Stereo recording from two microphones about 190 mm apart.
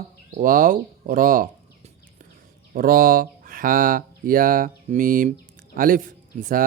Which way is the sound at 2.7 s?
50° right (ahead or behind).